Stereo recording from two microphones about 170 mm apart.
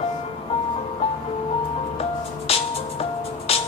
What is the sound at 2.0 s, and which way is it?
Music, 35° left (ahead or behind).